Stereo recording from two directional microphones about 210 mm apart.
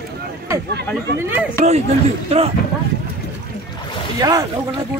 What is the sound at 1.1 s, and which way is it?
Speech, 10° right (ahead or behind).